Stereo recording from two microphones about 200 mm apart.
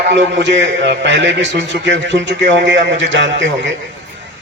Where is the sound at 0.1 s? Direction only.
65° right (ahead or behind).